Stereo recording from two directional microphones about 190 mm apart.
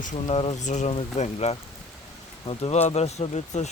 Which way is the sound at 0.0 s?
40° left (ahead or behind).